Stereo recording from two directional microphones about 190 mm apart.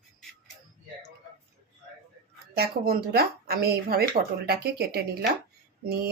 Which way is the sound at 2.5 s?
55° right (ahead or behind).